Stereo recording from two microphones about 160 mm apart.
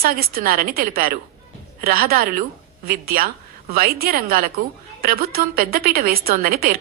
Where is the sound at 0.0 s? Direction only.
70° right (ahead or behind).